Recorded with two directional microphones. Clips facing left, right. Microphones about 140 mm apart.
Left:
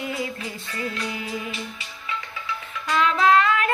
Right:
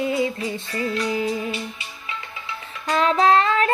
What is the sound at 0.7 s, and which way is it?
Music, 35° right (ahead or behind).